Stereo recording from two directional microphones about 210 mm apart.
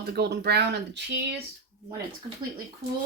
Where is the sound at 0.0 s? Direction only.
50° right (ahead or behind).